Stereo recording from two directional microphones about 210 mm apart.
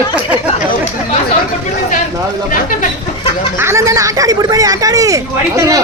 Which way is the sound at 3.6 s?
15° right (ahead or behind).